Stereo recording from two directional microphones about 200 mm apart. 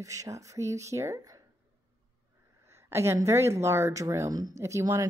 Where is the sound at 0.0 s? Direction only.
15° right (ahead or behind).